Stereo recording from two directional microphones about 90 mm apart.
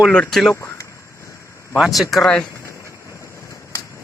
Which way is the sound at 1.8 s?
Centre (ahead or behind).